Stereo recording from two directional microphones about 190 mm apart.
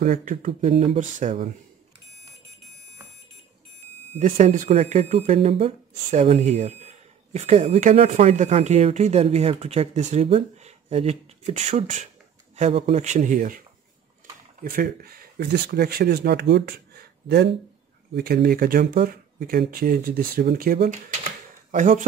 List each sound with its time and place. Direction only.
0.0 s speech: 45° right (ahead or behind)
0.5 s speech: 30° right (ahead or behind)
4.2 s speech: 40° right (ahead or behind)
14.6 s speech: 50° right (ahead or behind)